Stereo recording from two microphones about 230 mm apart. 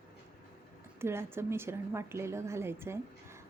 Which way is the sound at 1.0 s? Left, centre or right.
Centre.